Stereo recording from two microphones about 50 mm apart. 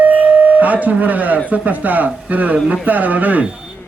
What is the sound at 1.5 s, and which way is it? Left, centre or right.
A man's voice, right.